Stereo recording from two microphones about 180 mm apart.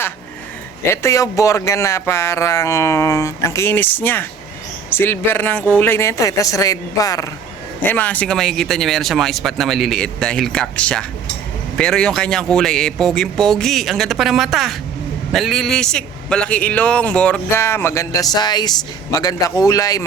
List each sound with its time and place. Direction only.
1.0 s a man's voice: 15° left (ahead or behind)
7.8 s a man's voice: 10° left (ahead or behind)